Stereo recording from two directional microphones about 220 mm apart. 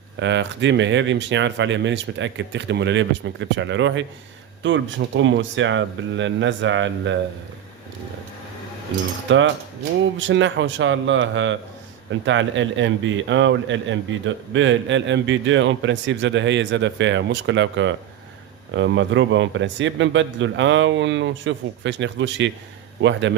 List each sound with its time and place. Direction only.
0.2 s a man's voice: 55° right (ahead or behind)
9.3 s a man's voice: 55° right (ahead or behind)